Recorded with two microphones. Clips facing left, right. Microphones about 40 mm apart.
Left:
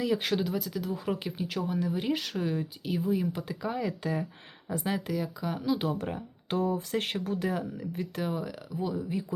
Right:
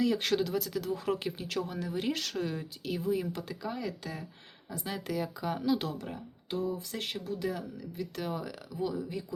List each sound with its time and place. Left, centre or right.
0.0 s speech: centre; by 4.9 s left
5.1 s speech: centre
6.5 s speech: left
8.2 s speech: centre